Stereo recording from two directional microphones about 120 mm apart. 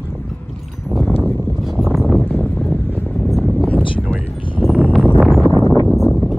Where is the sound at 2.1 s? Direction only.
15° left (ahead or behind).